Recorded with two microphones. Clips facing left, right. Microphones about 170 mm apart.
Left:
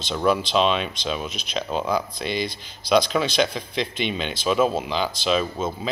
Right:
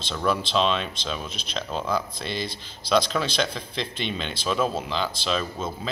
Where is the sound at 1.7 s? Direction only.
5° left (ahead or behind).